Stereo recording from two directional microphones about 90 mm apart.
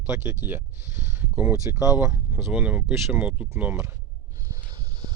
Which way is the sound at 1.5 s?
35° right (ahead or behind).